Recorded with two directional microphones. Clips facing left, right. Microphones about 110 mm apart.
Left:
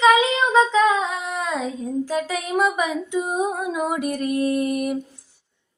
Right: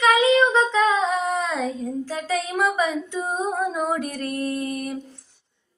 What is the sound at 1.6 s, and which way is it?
Female singing, 15° left (ahead or behind).